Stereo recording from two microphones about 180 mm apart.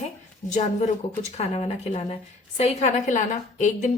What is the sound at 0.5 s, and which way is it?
A woman's voice, 40° left (ahead or behind).